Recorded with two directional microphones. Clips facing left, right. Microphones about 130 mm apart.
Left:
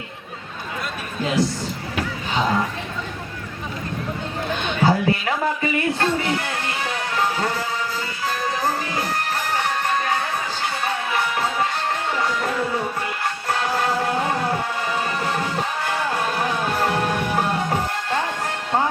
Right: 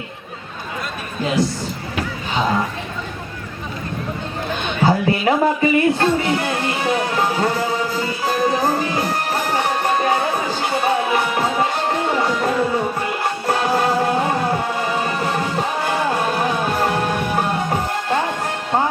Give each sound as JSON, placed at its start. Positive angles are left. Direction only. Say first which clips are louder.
{"t": 2.3, "sound": "speech", "louder": "right 2 dB", "side_deg": -20}
{"t": 4.5, "sound": "a sound", "louder": "right 2 dB", "side_deg": -20}
{"t": 8.7, "sound": "music", "louder": "right 5 dB", "side_deg": -20}